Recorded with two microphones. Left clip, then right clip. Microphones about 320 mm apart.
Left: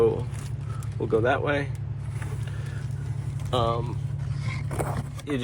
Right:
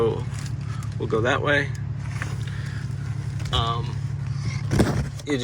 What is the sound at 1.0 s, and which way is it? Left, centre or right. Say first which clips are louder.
Speech: right 1 dB; centre.